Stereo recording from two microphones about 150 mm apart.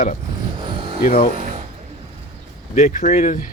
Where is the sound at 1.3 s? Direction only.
50° right (ahead or behind).